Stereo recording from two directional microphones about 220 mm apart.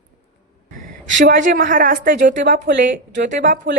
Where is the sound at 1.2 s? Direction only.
40° right (ahead or behind).